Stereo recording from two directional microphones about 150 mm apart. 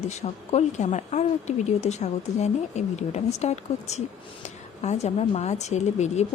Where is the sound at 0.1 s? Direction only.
50° left (ahead or behind).